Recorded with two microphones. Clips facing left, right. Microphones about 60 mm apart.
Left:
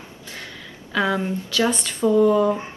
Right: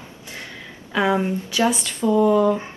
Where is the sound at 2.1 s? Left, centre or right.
Centre.